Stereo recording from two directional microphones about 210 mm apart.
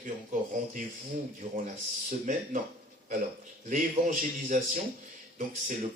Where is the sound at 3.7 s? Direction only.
40° right (ahead or behind).